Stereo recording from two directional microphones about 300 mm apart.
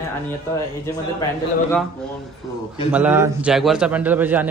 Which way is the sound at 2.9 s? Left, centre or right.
Centre.